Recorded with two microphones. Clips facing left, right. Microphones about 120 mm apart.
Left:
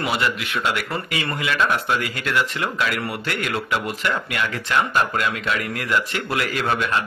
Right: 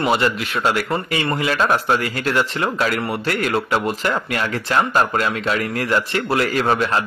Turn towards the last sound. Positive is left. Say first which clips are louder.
# right 4 dB
turn(degrees=-35)  # may be behind; listen again after turning